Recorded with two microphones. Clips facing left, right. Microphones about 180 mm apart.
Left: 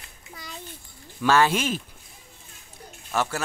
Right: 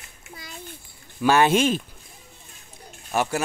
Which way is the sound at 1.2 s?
20° right (ahead or behind).